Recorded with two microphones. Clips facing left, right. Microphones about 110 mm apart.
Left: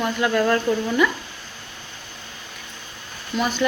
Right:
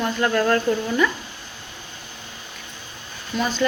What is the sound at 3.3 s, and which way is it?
Speech, 15° left (ahead or behind).